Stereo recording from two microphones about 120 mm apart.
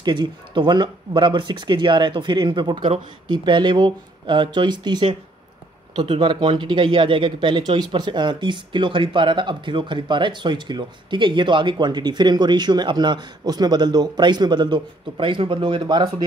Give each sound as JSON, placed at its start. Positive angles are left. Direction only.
{"t": 0.0, "sound": "speech", "side_deg": -40}